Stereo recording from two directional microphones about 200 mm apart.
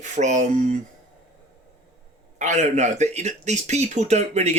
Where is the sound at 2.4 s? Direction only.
35° right (ahead or behind).